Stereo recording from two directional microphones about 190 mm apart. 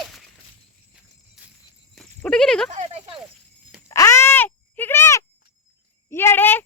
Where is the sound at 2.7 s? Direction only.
35° right (ahead or behind).